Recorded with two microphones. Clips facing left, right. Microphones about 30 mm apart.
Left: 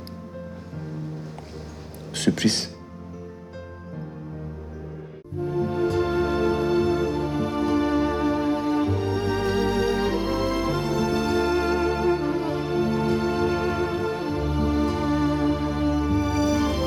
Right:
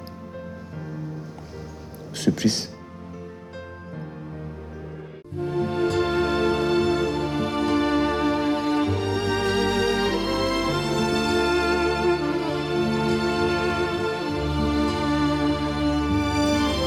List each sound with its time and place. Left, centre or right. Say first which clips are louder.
2.1 s speech: even; centre
5.4 s music: even; right